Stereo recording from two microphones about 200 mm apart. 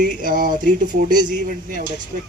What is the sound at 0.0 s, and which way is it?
Speech, 45° right (ahead or behind).